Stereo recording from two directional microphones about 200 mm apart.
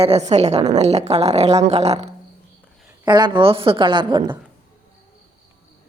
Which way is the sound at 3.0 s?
20° right (ahead or behind).